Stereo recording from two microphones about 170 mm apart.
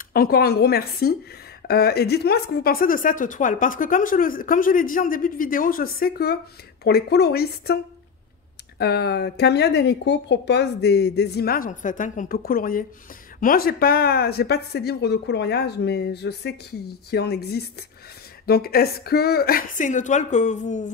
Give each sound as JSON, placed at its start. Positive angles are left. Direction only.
{"t": 0.1, "sound": "a woman's voice", "side_deg": 60}